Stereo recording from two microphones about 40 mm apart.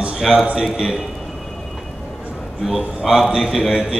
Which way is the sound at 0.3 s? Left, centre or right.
Centre.